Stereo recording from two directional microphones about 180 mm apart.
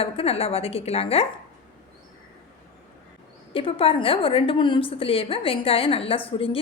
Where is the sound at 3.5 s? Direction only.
30° left (ahead or behind).